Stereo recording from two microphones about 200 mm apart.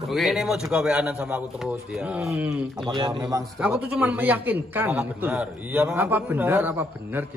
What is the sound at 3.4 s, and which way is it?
A man's voice, 5° right (ahead or behind).